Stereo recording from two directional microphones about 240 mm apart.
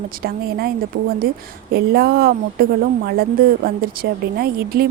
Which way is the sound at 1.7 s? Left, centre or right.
Right.